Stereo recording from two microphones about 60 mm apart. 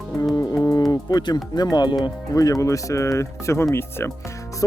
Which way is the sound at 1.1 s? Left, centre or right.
Left.